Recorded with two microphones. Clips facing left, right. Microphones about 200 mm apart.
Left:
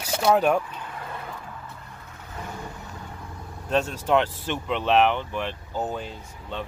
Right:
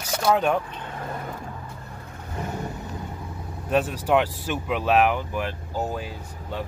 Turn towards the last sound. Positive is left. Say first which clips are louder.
# right 1 dB
turn(degrees=-5)  # may be behind; listen again after turning